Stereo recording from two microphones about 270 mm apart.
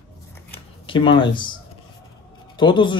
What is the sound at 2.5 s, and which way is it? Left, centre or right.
Speech, centre.